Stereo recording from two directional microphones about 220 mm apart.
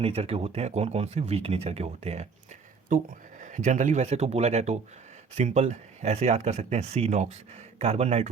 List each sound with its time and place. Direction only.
0.0 s speech: 25° right (ahead or behind)